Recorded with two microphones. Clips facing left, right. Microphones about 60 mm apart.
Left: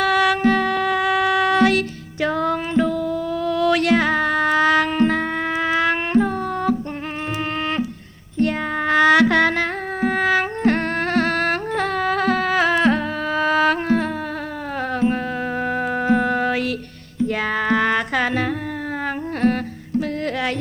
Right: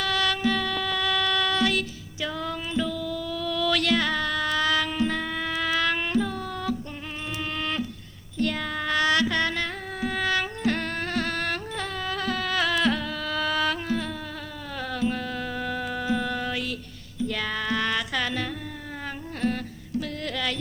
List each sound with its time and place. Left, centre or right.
0.0 s music: left
2.8 s music: left
5.5 s music: left
8.4 s child singing: left
9.0 s music: left
13.6 s music: left
14.9 s music: left
17.2 s music: left
20.0 s music: left